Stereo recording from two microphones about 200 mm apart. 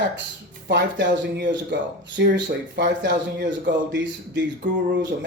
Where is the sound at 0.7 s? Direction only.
60° right (ahead or behind).